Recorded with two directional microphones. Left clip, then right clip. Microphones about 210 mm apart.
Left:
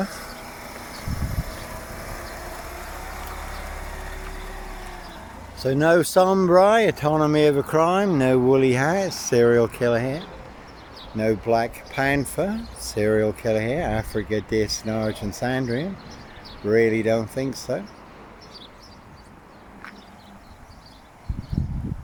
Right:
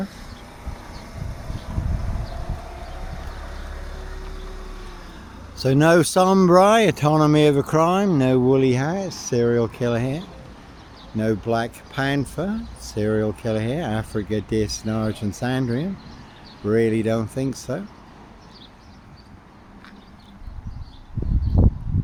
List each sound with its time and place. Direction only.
0.2 s vehicle: 40° left (ahead or behind)
5.5 s speech: 25° right (ahead or behind)